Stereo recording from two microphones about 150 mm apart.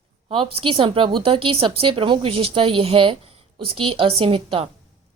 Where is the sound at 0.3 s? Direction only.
35° right (ahead or behind).